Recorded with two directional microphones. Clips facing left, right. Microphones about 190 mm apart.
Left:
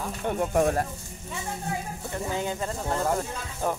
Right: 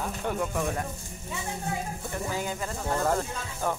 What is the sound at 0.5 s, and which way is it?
Speech, 50° left (ahead or behind).